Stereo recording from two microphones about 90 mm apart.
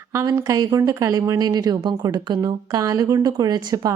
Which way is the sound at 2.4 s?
45° right (ahead or behind).